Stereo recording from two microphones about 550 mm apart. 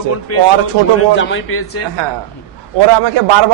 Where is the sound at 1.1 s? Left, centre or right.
Left.